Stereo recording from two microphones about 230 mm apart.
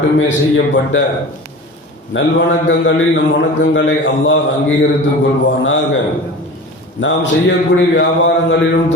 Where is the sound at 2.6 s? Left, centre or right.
Left.